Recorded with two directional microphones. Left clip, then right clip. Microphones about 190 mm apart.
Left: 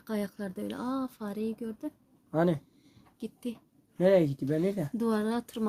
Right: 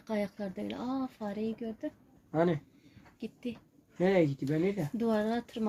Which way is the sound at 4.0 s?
75° left (ahead or behind).